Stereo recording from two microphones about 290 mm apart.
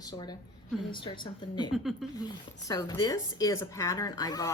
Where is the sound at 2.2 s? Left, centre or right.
Centre.